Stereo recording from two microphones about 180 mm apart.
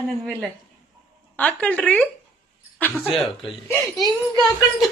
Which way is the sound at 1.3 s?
10° left (ahead or behind).